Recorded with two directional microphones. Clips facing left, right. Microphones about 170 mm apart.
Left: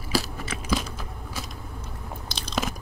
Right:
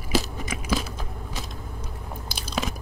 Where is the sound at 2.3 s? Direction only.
5° right (ahead or behind).